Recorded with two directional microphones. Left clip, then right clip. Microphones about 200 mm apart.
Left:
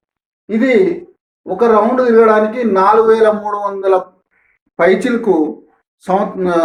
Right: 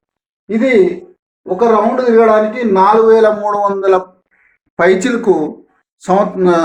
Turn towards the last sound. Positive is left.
turn(degrees=-20)  # may be behind; listen again after turning